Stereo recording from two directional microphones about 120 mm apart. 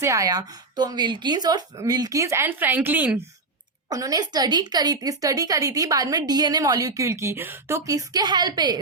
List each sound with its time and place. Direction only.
0.0 s a woman's voice: 25° right (ahead or behind)
3.8 s a woman's voice: 30° right (ahead or behind)